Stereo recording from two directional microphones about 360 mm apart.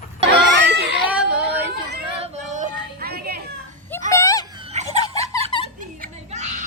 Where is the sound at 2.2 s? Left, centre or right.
Centre.